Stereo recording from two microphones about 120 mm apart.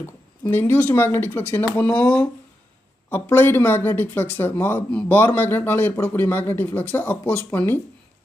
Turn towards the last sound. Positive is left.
turn(degrees=20)  # may be behind; listen again after turning